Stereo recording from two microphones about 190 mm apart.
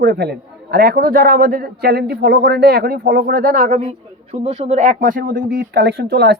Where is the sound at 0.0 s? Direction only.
60° right (ahead or behind); by 3.8 s 45° right (ahead or behind).